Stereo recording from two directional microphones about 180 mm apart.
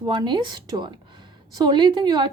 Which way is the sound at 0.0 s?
25° right (ahead or behind).